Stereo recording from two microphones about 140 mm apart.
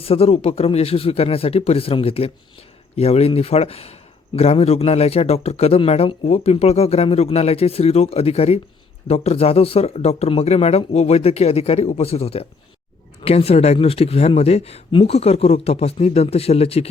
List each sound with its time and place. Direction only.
0.0 s a man's voice: 45° left (ahead or behind)